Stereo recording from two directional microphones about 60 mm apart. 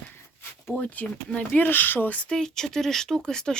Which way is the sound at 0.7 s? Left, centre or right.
Left.